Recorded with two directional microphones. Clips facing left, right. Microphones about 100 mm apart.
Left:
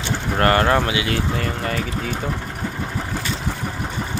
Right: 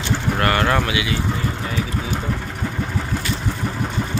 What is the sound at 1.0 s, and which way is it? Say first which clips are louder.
Speech: left 1 dB; 60° left (ahead or behind).